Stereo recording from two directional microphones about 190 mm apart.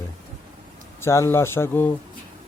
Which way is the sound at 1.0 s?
15° left (ahead or behind).